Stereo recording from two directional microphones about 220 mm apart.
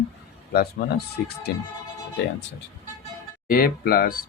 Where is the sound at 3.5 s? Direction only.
40° left (ahead or behind).